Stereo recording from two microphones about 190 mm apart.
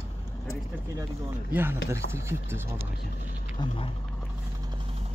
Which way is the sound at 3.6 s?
25° left (ahead or behind).